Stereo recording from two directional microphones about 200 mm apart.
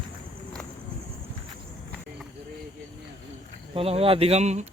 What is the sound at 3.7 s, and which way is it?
Speech, 30° right (ahead or behind).